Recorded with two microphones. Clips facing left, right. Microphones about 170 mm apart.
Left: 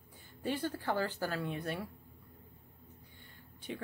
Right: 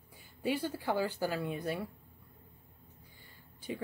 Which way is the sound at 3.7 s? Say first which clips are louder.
Right 3 dB; 5° right (ahead or behind).